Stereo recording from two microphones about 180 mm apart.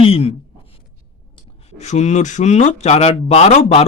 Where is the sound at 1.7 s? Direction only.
40° left (ahead or behind).